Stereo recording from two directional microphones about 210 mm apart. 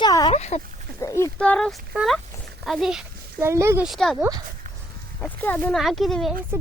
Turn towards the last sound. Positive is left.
turn(degrees=0)  # may be behind; listen again after turning